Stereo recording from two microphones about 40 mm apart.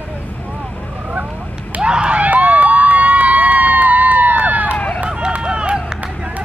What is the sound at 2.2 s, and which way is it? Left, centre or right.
Crowd, right.